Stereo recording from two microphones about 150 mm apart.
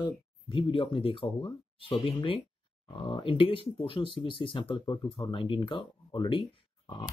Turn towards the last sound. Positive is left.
turn(degrees=35)  # may be behind; listen again after turning